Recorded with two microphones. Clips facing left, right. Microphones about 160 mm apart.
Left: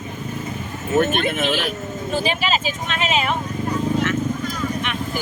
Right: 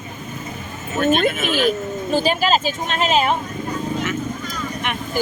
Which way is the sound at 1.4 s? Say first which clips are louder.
Right 4 dB; 50° right (ahead or behind).